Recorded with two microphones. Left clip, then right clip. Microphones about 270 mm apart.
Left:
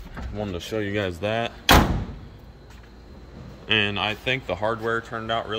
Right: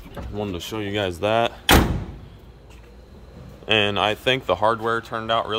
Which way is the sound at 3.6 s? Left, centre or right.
Centre.